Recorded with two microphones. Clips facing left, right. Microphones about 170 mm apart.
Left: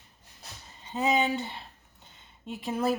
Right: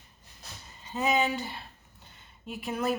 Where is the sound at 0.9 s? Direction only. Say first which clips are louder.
Left 1 dB; 30° left (ahead or behind).